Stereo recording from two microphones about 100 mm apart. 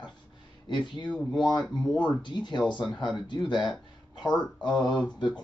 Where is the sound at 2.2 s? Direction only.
50° left (ahead or behind).